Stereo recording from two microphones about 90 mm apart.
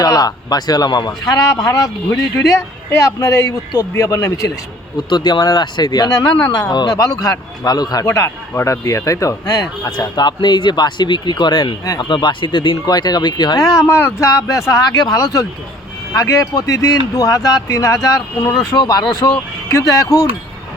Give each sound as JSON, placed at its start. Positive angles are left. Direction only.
{"t": 0.0, "sound": "speech", "side_deg": 45}
{"t": 2.1, "sound": "speech", "side_deg": 35}
{"t": 4.9, "sound": "speech", "side_deg": 50}
{"t": 8.0, "sound": "speech", "side_deg": 35}
{"t": 12.8, "sound": "speech", "side_deg": 50}
{"t": 13.6, "sound": "speech", "side_deg": 35}